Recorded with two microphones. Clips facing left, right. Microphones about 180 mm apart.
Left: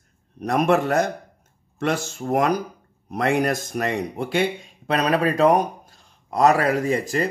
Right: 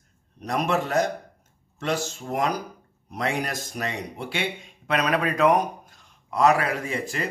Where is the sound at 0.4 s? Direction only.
55° left (ahead or behind).